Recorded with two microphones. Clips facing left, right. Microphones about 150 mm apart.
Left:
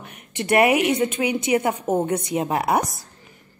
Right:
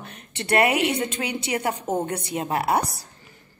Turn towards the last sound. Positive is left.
turn(degrees=20)  # may be behind; listen again after turning